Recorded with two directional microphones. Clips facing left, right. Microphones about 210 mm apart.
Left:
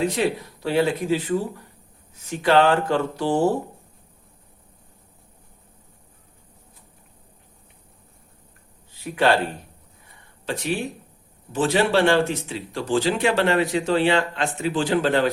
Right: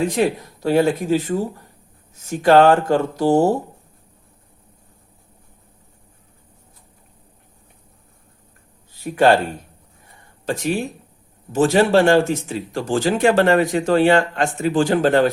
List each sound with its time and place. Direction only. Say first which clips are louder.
0.2 s speech: right 4 dB; 45° right (ahead or behind)
8.9 s a sound: right 5 dB; 45° right (ahead or behind)
10.4 s speech: right 4 dB; 45° right (ahead or behind)